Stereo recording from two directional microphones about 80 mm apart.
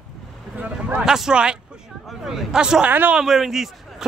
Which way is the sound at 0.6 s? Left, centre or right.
Centre.